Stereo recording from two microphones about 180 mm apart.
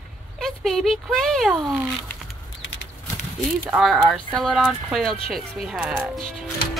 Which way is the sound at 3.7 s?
Centre (ahead or behind).